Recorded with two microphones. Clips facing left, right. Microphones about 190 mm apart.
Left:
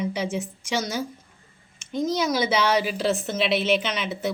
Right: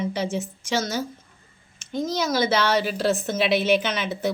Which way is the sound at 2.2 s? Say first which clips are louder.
Right 2 dB; 5° left (ahead or behind).